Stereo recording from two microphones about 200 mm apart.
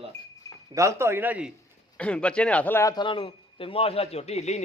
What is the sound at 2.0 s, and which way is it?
A man's voice, 5° left (ahead or behind).